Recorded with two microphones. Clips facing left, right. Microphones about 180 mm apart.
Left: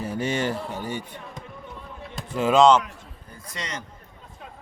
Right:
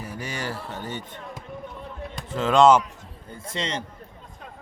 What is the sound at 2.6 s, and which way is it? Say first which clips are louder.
Speech: right 1 dB; 5° right (ahead or behind).